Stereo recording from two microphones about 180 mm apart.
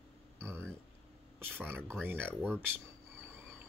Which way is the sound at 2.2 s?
5° left (ahead or behind).